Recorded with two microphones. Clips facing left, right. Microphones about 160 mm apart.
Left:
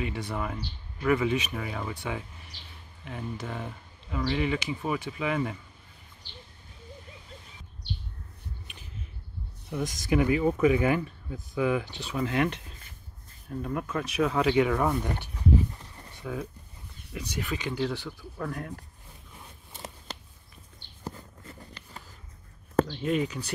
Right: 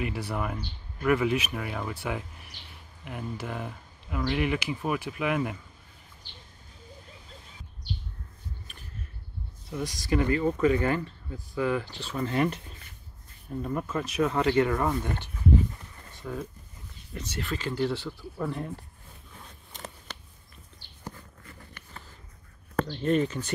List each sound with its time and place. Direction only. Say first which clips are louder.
0.0 s speech: right 1 dB; 5° right (ahead or behind)
9.7 s speech: left 1 dB; 15° left (ahead or behind)
10.2 s speech: left 1 dB; 10° left (ahead or behind)
12.2 s speech: even; centre (ahead or behind)
15.0 s a sound: even; 15° left (ahead or behind)
17.1 s speech: left 1 dB; 5° left (ahead or behind)
17.5 s speech: right 2 dB; 15° left (ahead or behind)
18.4 s speech: right 2 dB; centre (ahead or behind)
21.0 s a sound: left 3 dB; 20° left (ahead or behind)
22.9 s speech: right 3 dB; 5° left (ahead or behind)